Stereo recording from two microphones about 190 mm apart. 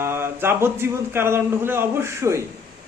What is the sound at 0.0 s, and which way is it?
A man's voice, 10° right (ahead or behind).